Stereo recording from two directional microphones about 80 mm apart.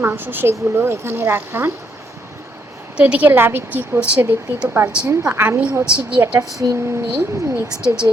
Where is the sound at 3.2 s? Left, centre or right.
Right.